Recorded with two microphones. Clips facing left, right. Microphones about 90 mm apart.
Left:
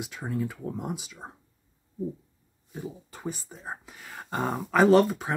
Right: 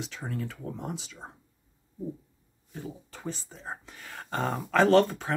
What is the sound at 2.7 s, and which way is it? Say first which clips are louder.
Speech: left 2 dB; 15° left (ahead or behind).